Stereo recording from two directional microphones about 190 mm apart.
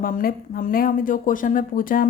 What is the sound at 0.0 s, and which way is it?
Speech, 50° left (ahead or behind).